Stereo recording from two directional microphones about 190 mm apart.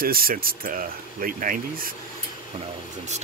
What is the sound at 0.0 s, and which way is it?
Speech, 50° right (ahead or behind).